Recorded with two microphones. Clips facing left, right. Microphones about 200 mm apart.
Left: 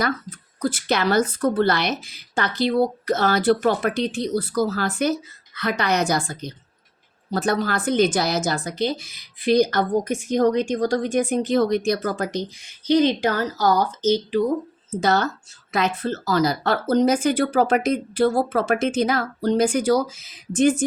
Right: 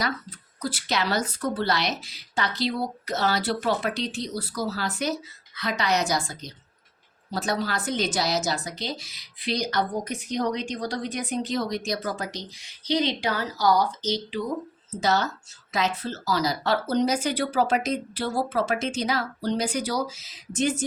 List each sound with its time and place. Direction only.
0.0 s a woman's voice: 50° left (ahead or behind)